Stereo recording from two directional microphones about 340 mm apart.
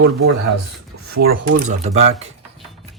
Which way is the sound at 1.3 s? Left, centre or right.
Right.